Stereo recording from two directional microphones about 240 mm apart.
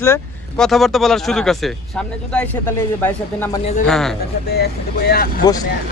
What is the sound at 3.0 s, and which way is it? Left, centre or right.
Speech, centre.